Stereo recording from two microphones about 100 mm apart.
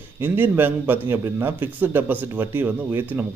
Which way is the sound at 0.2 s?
20° right (ahead or behind).